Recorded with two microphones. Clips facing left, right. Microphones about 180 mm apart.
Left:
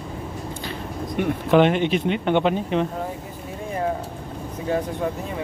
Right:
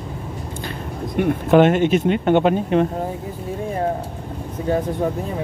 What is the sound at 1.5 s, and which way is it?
Speech, 45° right (ahead or behind).